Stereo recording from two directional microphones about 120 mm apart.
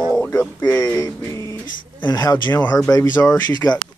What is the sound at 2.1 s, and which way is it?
Speech, 35° left (ahead or behind).